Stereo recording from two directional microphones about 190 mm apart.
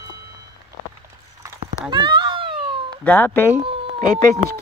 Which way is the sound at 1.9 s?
25° right (ahead or behind).